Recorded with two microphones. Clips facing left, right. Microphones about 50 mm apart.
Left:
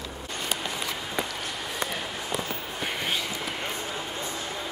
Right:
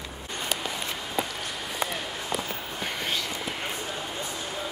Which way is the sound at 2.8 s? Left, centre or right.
Centre.